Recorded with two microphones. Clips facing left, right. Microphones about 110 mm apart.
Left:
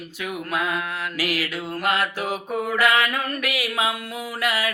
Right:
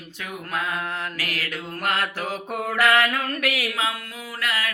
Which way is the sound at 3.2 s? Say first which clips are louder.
Right 1 dB; 90° right.